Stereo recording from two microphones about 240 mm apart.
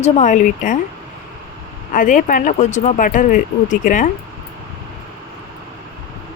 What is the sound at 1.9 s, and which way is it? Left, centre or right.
Speech, left.